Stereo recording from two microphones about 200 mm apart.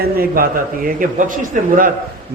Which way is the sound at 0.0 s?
45° right (ahead or behind).